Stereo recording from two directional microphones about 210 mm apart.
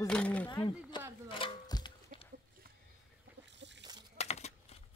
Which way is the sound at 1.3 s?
20° left (ahead or behind).